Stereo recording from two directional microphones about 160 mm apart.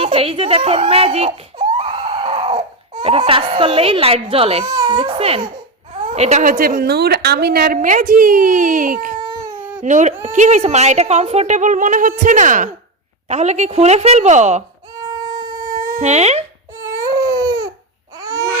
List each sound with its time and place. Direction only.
0.0 s speech: 35° right (ahead or behind)
1.5 s a sound: 30° right (ahead or behind)
2.9 s speech: 30° right (ahead or behind)
4.6 s a woman's voice: 25° right (ahead or behind); by 9.1 s 60° right (ahead or behind)
9.2 s baby cry: 25° right (ahead or behind)
9.8 s a woman's voice: 50° right (ahead or behind)
14.9 s music: 25° right (ahead or behind)
15.7 s a sound: 65° right (ahead or behind)
16.0 s a woman's voice: 45° right (ahead or behind)
16.8 s baby cry: 20° right (ahead or behind)
18.2 s babbling: 20° right (ahead or behind)